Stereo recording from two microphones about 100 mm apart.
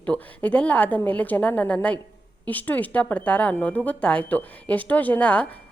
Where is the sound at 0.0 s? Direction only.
15° left (ahead or behind).